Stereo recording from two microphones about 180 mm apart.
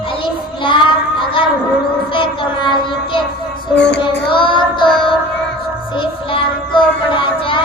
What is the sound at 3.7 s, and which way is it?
Child singing, 70° left (ahead or behind).